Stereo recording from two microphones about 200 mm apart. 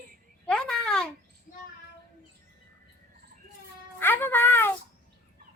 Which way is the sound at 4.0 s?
10° left (ahead or behind).